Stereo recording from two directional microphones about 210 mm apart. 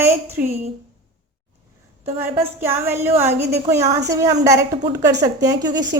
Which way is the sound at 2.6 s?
10° right (ahead or behind).